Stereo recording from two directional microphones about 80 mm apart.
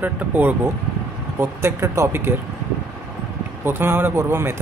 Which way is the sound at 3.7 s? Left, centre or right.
Right.